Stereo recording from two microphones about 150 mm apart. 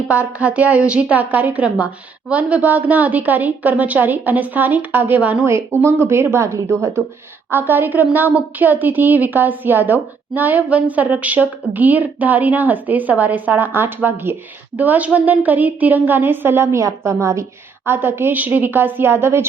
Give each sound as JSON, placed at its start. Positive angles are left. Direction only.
{"t": 0.1, "sound": "a woman's voice", "side_deg": -10}